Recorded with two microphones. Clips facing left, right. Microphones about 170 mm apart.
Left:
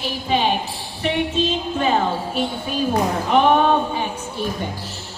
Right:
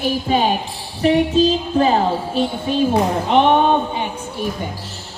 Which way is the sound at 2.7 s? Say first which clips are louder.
Right 4 dB; 25° right (ahead or behind).